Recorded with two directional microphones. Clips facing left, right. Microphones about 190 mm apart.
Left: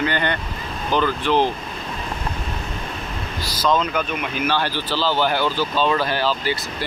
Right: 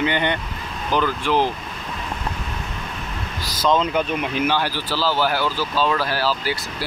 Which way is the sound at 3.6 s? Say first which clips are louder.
Right 1 dB; 25° right (ahead or behind).